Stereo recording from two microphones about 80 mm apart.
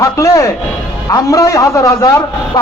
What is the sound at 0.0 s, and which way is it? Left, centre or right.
A man's voice, left.